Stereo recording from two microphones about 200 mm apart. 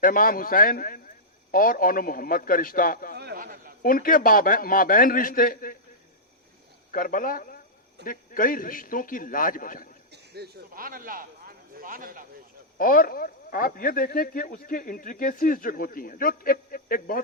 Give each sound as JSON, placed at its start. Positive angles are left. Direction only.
{"t": 0.0, "sound": "speech", "side_deg": 45}
{"t": 3.2, "sound": "a sound", "side_deg": -50}
{"t": 3.8, "sound": "speech", "side_deg": 45}
{"t": 6.9, "sound": "speech", "side_deg": 45}
{"t": 10.1, "sound": "speech", "side_deg": -55}
{"t": 12.7, "sound": "speech", "side_deg": 45}